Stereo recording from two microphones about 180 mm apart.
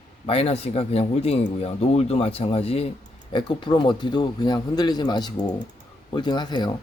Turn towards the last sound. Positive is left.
turn(degrees=25)  # may be behind; listen again after turning